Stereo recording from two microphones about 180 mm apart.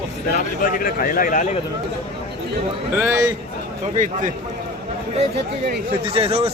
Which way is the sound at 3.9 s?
45° right (ahead or behind).